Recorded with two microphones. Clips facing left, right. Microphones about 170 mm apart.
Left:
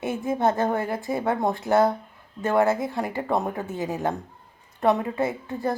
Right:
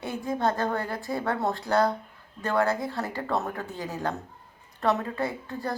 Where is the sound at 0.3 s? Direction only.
20° left (ahead or behind).